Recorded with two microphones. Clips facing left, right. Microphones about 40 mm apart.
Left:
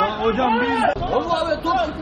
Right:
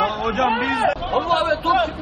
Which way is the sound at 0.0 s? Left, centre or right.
Centre.